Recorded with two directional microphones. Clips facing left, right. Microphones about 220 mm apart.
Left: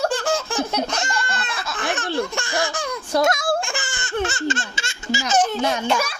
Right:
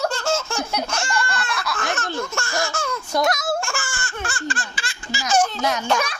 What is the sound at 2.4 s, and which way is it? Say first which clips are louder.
Laughter: left 1 dB; 15° left (ahead or behind).